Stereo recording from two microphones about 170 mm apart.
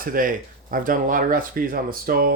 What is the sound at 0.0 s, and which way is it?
Speech, 55° right (ahead or behind).